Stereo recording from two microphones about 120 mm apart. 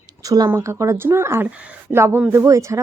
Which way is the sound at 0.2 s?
30° right (ahead or behind).